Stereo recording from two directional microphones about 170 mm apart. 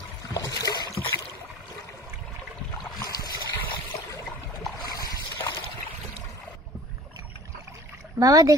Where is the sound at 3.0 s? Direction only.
20° left (ahead or behind).